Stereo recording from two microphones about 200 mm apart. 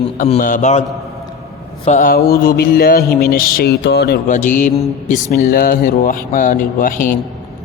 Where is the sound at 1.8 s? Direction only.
40° left (ahead or behind); by 4.3 s 55° left (ahead or behind).